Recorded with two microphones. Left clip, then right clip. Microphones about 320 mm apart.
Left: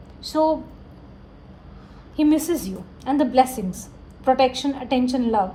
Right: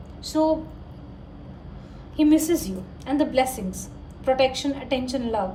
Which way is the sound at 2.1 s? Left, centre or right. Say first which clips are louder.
Even; centre.